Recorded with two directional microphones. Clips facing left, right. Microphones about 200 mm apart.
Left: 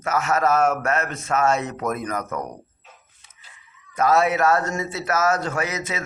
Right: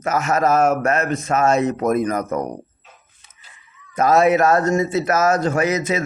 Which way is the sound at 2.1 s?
40° right (ahead or behind).